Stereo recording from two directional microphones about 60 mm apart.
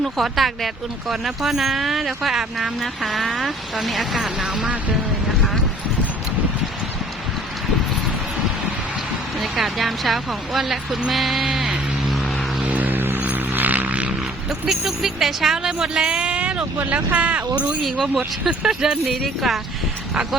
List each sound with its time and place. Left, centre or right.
0.0 s speech: centre
9.4 s speech: centre
11.1 s music: centre
12.6 s vehicle: right
14.7 s speech: centre; by 17.7 s right
17.8 s speech: centre
18.2 s speech: centre